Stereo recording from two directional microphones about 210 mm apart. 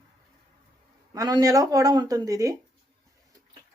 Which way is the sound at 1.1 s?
15° right (ahead or behind).